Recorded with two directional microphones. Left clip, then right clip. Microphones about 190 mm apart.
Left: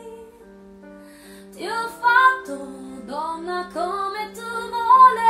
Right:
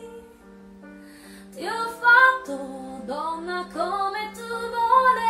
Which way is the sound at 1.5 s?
20° right (ahead or behind).